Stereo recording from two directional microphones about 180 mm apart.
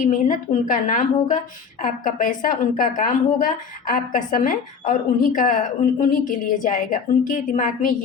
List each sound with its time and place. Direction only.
0.0 s a woman's voice: 45° left (ahead or behind)